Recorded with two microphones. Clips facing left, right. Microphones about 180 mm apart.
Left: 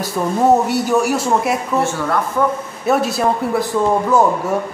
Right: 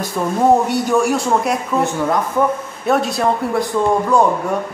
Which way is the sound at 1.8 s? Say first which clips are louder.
Right 1 dB; 15° right (ahead or behind).